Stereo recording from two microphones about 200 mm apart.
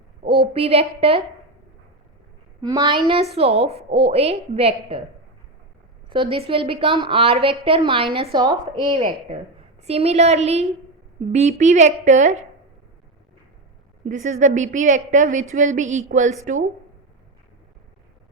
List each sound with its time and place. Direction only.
0.3 s a woman's voice: 30° right (ahead or behind)
2.6 s a woman's voice: 20° right (ahead or behind)
6.1 s a woman's voice: 25° right (ahead or behind)
14.0 s a woman's voice: 40° right (ahead or behind)